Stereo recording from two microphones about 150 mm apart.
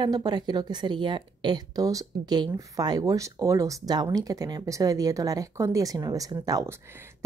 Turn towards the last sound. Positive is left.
turn(degrees=-15)  # may be behind; listen again after turning